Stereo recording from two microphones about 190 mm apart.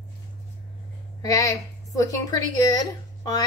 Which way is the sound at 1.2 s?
15° left (ahead or behind).